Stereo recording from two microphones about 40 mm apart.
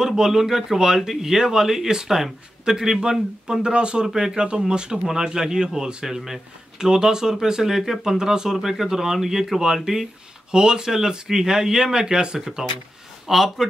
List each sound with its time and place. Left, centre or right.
0.0 s speech: centre
12.4 s speech: centre